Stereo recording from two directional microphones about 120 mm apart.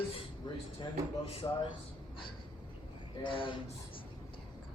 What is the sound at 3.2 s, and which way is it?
Speech, 45° left (ahead or behind).